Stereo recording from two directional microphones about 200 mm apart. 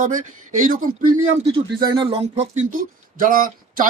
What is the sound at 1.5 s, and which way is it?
Speech, 30° right (ahead or behind).